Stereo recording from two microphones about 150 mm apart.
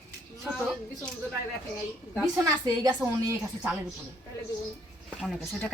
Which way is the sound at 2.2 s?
25° right (ahead or behind).